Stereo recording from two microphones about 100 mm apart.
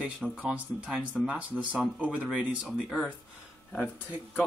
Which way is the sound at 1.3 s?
15° right (ahead or behind).